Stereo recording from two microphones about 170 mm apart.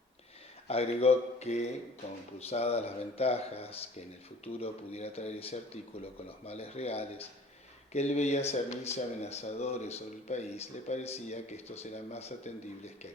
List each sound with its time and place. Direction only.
0.7 s speech: 35° left (ahead or behind)